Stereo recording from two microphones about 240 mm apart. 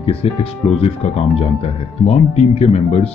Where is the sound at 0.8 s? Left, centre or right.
Left.